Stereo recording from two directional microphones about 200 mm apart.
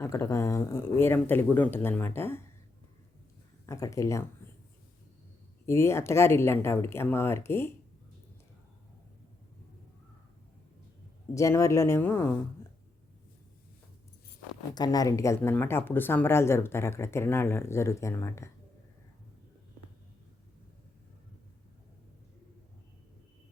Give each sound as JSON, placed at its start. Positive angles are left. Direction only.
{"t": 0.0, "sound": "speech", "side_deg": 15}
{"t": 3.7, "sound": "speech", "side_deg": 15}
{"t": 5.6, "sound": "speech", "side_deg": 15}
{"t": 11.3, "sound": "speech", "side_deg": 15}
{"t": 14.8, "sound": "speech", "side_deg": 20}